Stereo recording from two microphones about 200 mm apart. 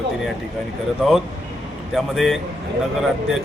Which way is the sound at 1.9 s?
Centre (ahead or behind).